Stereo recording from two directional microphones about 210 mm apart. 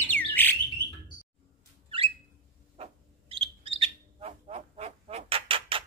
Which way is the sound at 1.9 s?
25° right (ahead or behind).